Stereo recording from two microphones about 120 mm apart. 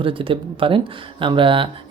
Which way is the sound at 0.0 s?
50° right (ahead or behind).